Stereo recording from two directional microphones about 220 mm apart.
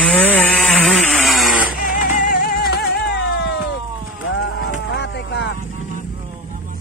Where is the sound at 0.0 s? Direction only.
5° left (ahead or behind).